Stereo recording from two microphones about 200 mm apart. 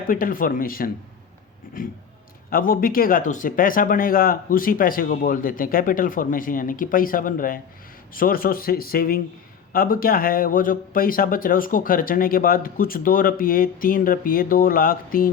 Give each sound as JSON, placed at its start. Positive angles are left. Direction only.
{"t": 0.1, "sound": "speech", "side_deg": 45}
{"t": 2.5, "sound": "speech", "side_deg": 45}